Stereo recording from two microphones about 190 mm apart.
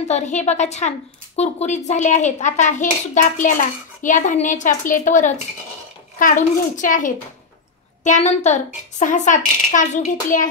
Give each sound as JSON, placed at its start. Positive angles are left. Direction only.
{"t": 0.1, "sound": "a woman's voice", "side_deg": 35}